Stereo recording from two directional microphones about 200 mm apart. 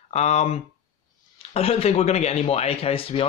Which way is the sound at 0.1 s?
35° left (ahead or behind).